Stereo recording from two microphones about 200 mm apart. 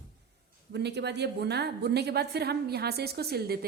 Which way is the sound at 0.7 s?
55° right (ahead or behind).